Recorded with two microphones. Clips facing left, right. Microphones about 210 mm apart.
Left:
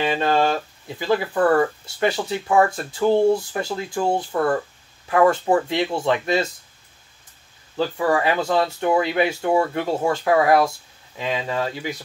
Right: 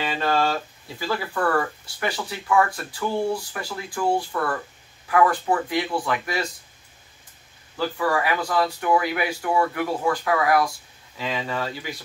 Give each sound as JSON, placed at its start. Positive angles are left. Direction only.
{"t": 0.0, "sound": "speech", "side_deg": 20}
{"t": 7.7, "sound": "speech", "side_deg": 25}